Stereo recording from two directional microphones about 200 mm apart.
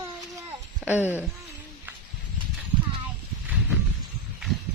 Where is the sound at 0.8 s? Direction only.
10° right (ahead or behind).